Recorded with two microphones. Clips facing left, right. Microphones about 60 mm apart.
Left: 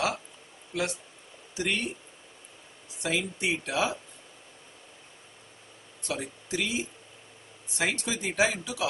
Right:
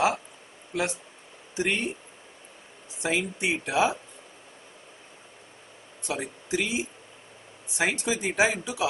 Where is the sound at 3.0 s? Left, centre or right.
Right.